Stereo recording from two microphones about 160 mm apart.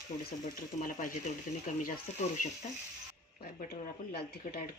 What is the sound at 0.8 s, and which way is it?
Speech, 60° left (ahead or behind).